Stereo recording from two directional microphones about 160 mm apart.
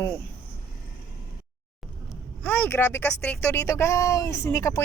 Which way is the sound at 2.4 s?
10° left (ahead or behind).